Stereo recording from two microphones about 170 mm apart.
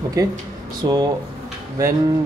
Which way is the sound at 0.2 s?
20° right (ahead or behind).